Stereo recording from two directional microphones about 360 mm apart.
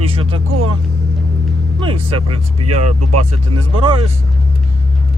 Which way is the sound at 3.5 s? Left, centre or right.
Centre.